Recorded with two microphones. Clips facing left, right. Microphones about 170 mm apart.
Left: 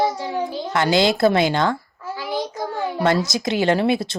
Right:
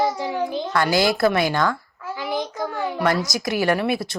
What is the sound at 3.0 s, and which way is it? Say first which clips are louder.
Speech: left 3 dB; 25° left (ahead or behind).